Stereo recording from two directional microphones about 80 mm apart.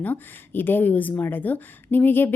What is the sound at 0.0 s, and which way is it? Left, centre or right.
Speech, left.